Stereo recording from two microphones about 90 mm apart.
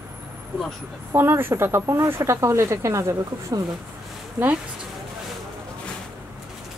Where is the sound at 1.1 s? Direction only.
25° right (ahead or behind).